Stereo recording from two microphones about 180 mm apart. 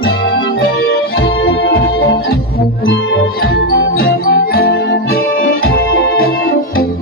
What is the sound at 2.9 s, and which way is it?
Music, 90° left.